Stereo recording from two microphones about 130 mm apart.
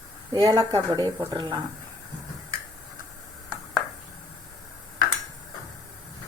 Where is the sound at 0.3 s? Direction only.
30° right (ahead or behind).